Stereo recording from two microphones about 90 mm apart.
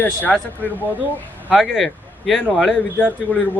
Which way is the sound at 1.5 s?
Centre (ahead or behind).